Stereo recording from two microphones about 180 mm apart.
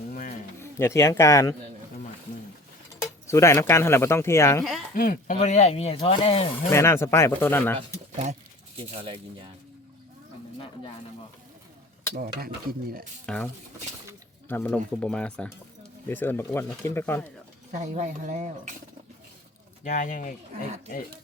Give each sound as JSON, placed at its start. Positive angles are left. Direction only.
{"t": 0.1, "sound": "a sound", "side_deg": 45}
{"t": 0.6, "sound": "speech", "side_deg": 15}
{"t": 3.0, "sound": "speech", "side_deg": 15}
{"t": 4.9, "sound": "speech", "side_deg": 50}
{"t": 6.7, "sound": "speech", "side_deg": 15}
{"t": 8.1, "sound": "speech", "side_deg": -40}
{"t": 13.2, "sound": "speech", "side_deg": 5}
{"t": 17.7, "sound": "speech", "side_deg": -45}
{"t": 19.8, "sound": "speech", "side_deg": 45}
{"t": 20.7, "sound": "speech", "side_deg": -40}